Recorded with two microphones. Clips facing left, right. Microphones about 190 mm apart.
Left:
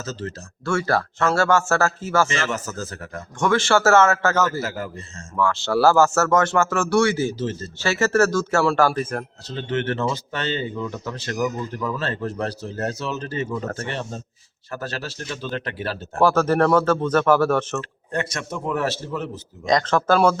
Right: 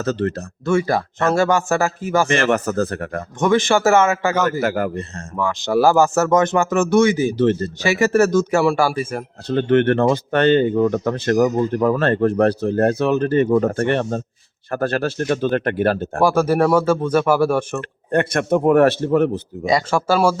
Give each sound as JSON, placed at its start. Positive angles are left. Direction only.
{"t": 0.0, "sound": "speech", "side_deg": -60}
{"t": 0.6, "sound": "speech", "side_deg": -20}
{"t": 2.2, "sound": "speech", "side_deg": -60}
{"t": 3.4, "sound": "speech", "side_deg": -15}
{"t": 4.6, "sound": "speech", "side_deg": -60}
{"t": 5.4, "sound": "speech", "side_deg": -15}
{"t": 7.3, "sound": "speech", "side_deg": -65}
{"t": 7.8, "sound": "speech", "side_deg": -15}
{"t": 9.5, "sound": "speech", "side_deg": -55}
{"t": 16.2, "sound": "speech", "side_deg": -10}
{"t": 17.7, "sound": "speech", "side_deg": -60}
{"t": 19.6, "sound": "speech", "side_deg": -10}